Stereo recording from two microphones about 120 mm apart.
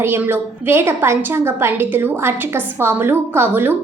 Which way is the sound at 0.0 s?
20° right (ahead or behind).